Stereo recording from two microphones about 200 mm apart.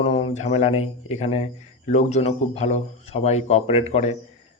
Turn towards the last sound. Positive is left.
turn(degrees=30)  # may be behind; listen again after turning